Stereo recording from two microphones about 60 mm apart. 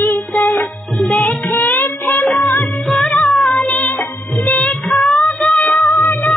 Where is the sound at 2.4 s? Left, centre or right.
Left.